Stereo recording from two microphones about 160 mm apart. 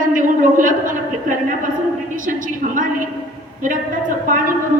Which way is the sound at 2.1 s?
55° right (ahead or behind).